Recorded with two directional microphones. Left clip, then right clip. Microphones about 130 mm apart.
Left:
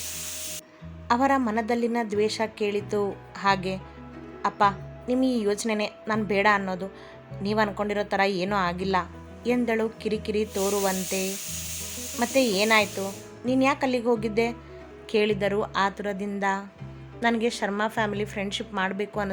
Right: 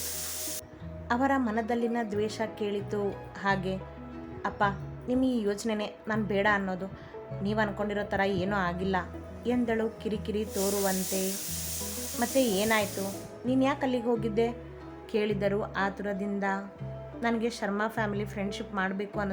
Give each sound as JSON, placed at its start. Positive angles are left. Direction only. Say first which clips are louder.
{"t": 1.0, "sound": "a woman's voice", "louder": "left 5 dB", "side_deg": 40}
{"t": 12.2, "sound": "a woman's voice", "louder": "left 4 dB", "side_deg": 35}